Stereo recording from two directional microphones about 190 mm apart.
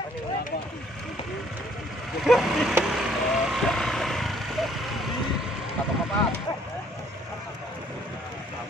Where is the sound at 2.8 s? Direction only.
Centre (ahead or behind).